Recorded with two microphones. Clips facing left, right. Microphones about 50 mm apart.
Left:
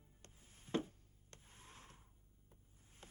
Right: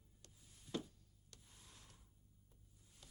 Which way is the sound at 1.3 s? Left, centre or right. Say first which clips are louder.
Left 5 dB; left.